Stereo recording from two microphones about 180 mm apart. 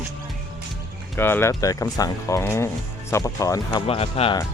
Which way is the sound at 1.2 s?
10° left (ahead or behind).